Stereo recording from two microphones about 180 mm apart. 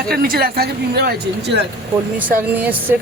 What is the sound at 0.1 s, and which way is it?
Speech, 55° right (ahead or behind).